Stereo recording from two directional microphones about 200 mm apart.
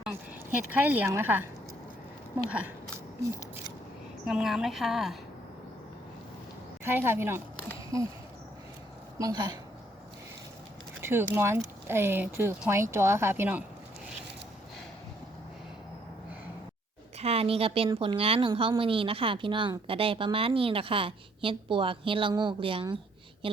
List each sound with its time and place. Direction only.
0.9 s speech: 10° right (ahead or behind)
2.5 s speech: 5° right (ahead or behind)
4.3 s a woman's voice: centre (ahead or behind)
6.8 s speech: 10° right (ahead or behind)
9.1 s a woman's voice: 20° right (ahead or behind)
11.0 s a sound: 10° right (ahead or behind)
11.3 s speech: 10° right (ahead or behind)
17.2 s a woman's voice: 30° right (ahead or behind)